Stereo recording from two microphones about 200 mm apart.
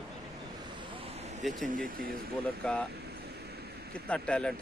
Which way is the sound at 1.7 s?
45° right (ahead or behind).